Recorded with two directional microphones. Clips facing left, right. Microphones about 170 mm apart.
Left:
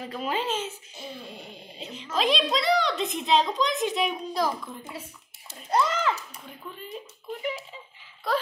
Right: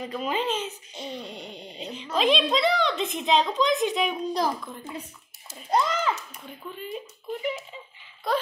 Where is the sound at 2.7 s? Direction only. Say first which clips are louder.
Left 1 dB; centre (ahead or behind).